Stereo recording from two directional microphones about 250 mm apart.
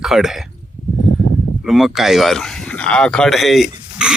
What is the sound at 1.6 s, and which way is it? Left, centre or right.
Speech, centre.